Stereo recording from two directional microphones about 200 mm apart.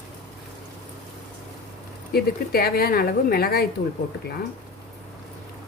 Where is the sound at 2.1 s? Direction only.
50° left (ahead or behind).